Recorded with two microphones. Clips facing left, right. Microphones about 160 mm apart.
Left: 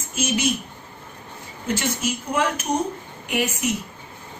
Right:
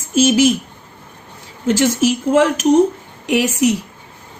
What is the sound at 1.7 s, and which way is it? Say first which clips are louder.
A woman's voice: right 10 dB; 90° right.